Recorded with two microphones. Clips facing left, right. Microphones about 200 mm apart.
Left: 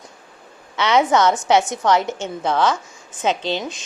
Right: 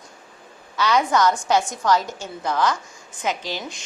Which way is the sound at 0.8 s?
25° left (ahead or behind).